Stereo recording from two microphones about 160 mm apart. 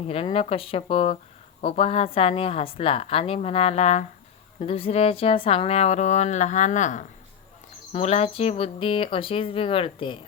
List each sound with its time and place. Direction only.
0.1 s a woman's voice: 35° left (ahead or behind)